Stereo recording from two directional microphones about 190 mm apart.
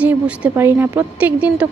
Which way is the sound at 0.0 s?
10° right (ahead or behind).